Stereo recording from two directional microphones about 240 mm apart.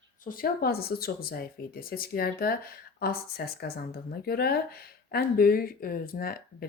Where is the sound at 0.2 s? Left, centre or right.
Left.